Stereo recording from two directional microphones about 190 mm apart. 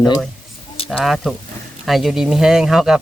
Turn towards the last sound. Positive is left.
turn(degrees=-5)  # may be behind; listen again after turning